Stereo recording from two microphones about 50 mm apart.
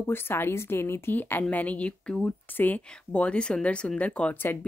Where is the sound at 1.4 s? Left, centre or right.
Left.